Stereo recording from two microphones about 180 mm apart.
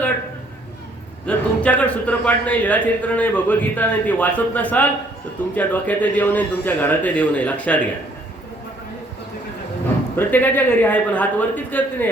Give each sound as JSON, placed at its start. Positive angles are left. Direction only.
{"t": 1.3, "sound": "a man's voice", "side_deg": 5}
{"t": 10.2, "sound": "a man's voice", "side_deg": 10}